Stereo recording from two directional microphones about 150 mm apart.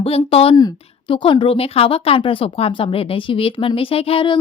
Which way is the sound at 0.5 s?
30° left (ahead or behind).